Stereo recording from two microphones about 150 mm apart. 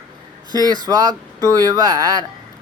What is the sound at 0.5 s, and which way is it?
Speech, 25° right (ahead or behind).